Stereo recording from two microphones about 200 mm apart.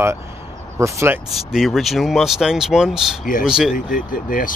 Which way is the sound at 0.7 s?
15° right (ahead or behind).